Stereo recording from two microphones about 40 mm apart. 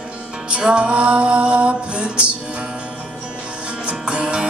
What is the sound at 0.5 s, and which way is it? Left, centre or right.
Music, right.